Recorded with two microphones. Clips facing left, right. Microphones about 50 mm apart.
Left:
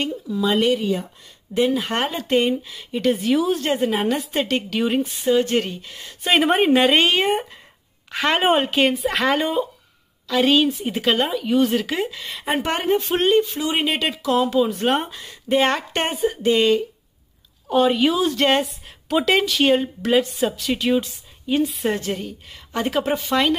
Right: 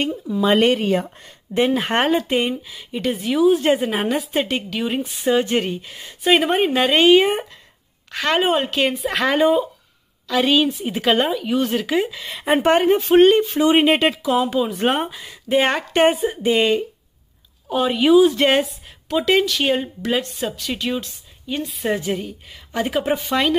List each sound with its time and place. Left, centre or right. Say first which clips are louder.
0.0 s speech: right 2 dB; right
0.6 s speech: right 3 dB; right
1.5 s speech: right 2 dB; right
2.1 s speech: even; centre
3.6 s speech: right 2 dB; centre
5.0 s speech: even; right
6.2 s speech: even; centre
8.1 s a woman's voice: even; centre
8.8 s speech: left 1 dB; centre
12.6 s speech: right 6 dB; right
13.2 s speech: right 5 dB; right
15.0 s speech: right 2 dB; centre
17.6 s speech: right 1 dB; centre
19.0 s speech: right 1 dB; centre